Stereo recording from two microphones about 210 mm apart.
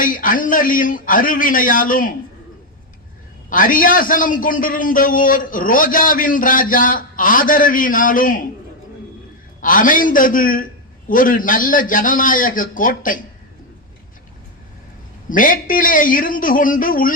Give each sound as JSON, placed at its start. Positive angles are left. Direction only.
{"t": 0.0, "sound": "a man's voice", "side_deg": 40}
{"t": 3.5, "sound": "a man's voice", "side_deg": 40}
{"t": 9.6, "sound": "a man's voice", "side_deg": 40}
{"t": 15.3, "sound": "a man's voice", "side_deg": 40}